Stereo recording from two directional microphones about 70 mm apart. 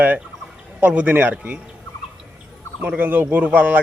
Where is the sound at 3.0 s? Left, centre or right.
Right.